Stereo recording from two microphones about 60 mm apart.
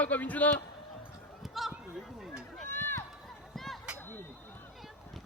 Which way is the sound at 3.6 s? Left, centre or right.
Centre.